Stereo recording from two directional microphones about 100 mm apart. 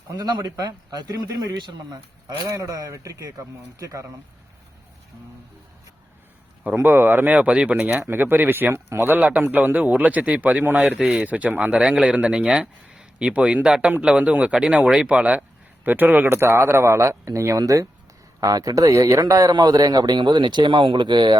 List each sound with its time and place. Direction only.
0.2 s a man's voice: 40° right (ahead or behind)
6.7 s a man's voice: 20° right (ahead or behind); by 21.3 s 50° right (ahead or behind)